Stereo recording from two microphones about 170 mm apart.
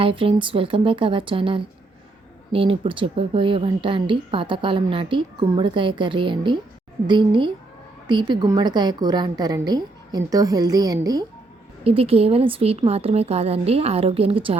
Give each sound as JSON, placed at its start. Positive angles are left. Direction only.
{"t": 0.0, "sound": "a woman's voice", "side_deg": -30}
{"t": 11.8, "sound": "a woman's voice", "side_deg": -35}